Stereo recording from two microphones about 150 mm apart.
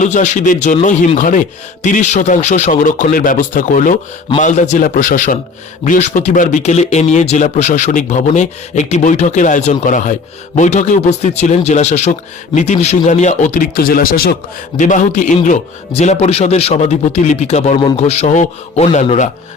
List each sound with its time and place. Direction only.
0.0 s speech: 55° left (ahead or behind); by 14.3 s 80° left
14.8 s speech: 55° left (ahead or behind)
15.9 s speech: 45° left (ahead or behind)